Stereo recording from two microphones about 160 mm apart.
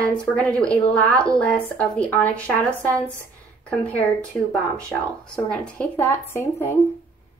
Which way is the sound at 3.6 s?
10° left (ahead or behind).